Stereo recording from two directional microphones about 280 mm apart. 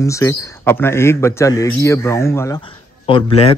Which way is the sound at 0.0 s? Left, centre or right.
Centre.